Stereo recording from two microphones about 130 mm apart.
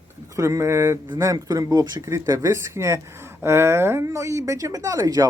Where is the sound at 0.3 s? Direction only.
25° right (ahead or behind).